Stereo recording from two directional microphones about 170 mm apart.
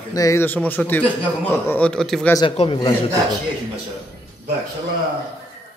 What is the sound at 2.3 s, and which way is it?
Speech, 30° left (ahead or behind).